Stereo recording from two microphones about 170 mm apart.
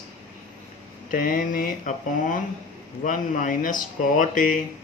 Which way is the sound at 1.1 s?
55° left (ahead or behind).